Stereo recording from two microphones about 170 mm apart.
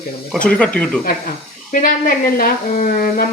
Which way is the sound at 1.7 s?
50° left (ahead or behind).